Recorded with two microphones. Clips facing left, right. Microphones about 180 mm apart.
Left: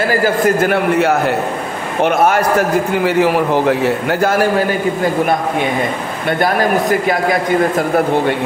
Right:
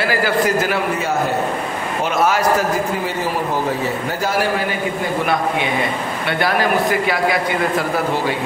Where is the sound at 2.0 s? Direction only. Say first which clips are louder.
Left 4 dB; 55° left (ahead or behind).